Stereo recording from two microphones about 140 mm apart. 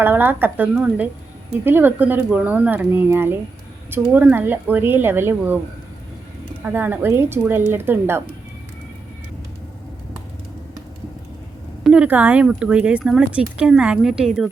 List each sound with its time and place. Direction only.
0.0 s speech: 15° right (ahead or behind)
6.7 s speech: 15° right (ahead or behind)
11.8 s speech: 5° right (ahead or behind)